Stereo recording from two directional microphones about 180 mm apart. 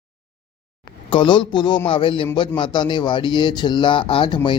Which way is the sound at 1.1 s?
25° left (ahead or behind).